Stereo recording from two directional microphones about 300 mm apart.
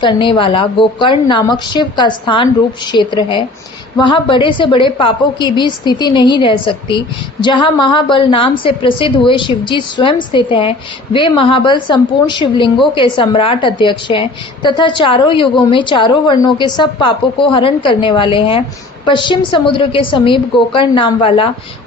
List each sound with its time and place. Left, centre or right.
0.0 s a woman's voice: centre